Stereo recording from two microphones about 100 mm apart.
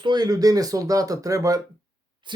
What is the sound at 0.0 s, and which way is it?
Speech, 45° right (ahead or behind).